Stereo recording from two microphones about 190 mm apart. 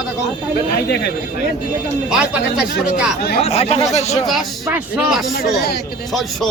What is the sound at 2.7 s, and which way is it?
Speech, 60° left (ahead or behind).